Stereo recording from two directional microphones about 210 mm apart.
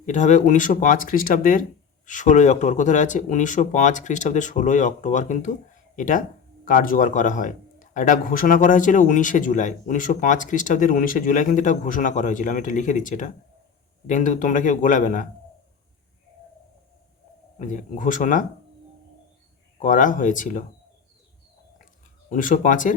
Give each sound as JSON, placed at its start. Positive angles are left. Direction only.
{"t": 0.0, "sound": "a man's voice", "side_deg": 35}
{"t": 17.6, "sound": "a man's voice", "side_deg": 40}
{"t": 19.8, "sound": "a man's voice", "side_deg": 40}
{"t": 22.3, "sound": "a man's voice", "side_deg": 40}